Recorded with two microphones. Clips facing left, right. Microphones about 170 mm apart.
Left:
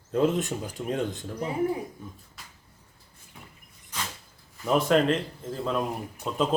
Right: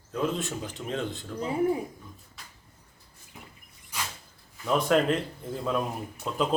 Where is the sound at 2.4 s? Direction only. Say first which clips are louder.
Left 1 dB; centre (ahead or behind).